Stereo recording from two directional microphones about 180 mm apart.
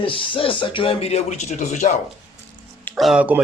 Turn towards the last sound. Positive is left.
turn(degrees=-10)  # may be behind; listen again after turning